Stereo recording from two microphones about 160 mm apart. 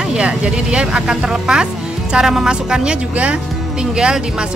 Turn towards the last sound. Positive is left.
turn(degrees=-5)  # may be behind; listen again after turning